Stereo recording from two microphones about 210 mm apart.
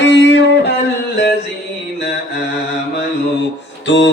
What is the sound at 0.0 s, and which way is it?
Music, 55° left (ahead or behind).